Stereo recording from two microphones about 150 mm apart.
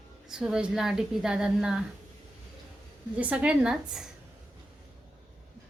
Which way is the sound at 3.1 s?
10° right (ahead or behind).